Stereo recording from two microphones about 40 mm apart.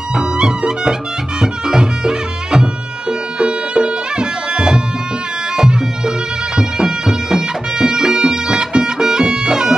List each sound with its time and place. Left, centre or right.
0.1 s music: centre